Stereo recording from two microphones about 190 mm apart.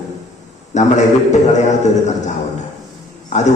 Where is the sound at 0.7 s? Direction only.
40° left (ahead or behind).